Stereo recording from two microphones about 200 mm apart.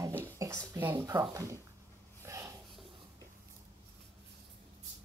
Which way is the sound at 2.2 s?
15° right (ahead or behind).